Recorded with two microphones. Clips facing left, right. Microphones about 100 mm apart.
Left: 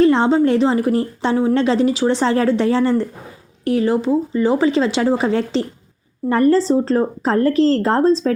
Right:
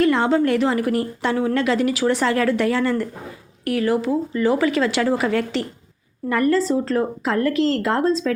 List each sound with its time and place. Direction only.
0.0 s a woman's voice: 25° left (ahead or behind)